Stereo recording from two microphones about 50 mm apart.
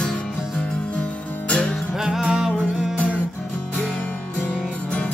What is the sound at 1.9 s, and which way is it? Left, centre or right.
Music, centre.